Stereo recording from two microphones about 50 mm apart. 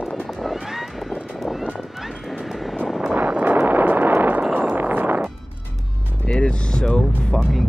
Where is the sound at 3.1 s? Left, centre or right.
Right.